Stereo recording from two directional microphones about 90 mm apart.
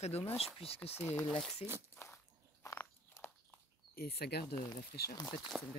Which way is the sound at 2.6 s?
35° left (ahead or behind).